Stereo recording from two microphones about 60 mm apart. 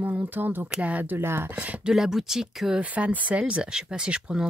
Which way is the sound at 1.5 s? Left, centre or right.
Right.